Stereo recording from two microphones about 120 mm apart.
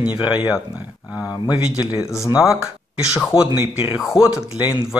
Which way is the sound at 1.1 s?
35° left (ahead or behind).